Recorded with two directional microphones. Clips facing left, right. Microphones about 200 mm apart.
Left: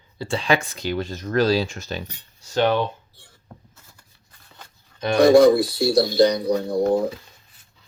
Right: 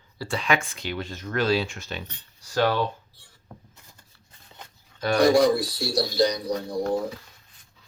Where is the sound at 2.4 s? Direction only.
25° left (ahead or behind).